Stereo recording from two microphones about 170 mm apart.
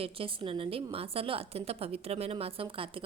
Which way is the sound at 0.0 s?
30° right (ahead or behind).